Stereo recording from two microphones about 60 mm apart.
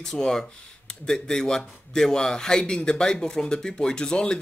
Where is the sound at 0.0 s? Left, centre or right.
Centre.